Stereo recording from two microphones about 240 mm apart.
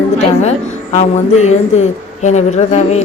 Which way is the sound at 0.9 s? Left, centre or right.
Left.